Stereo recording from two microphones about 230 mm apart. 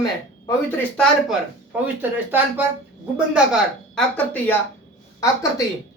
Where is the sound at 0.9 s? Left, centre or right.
Centre.